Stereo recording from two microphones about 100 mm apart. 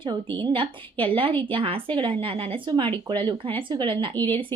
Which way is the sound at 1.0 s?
65° right (ahead or behind).